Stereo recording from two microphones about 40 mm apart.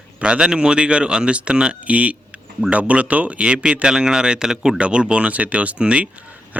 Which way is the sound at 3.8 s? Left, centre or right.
Centre.